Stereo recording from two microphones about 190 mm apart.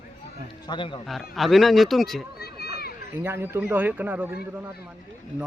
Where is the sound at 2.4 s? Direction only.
55° left (ahead or behind).